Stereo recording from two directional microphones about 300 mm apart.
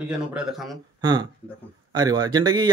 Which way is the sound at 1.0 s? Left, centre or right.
Centre.